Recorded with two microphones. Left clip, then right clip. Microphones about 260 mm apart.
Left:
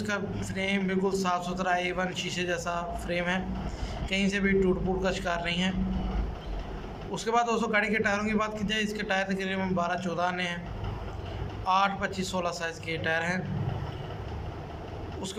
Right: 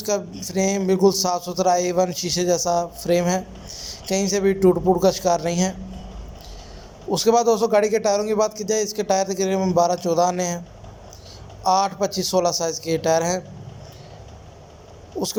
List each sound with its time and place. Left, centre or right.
0.1 s a man's voice: centre
7.1 s a man's voice: centre
11.6 s a man's voice: right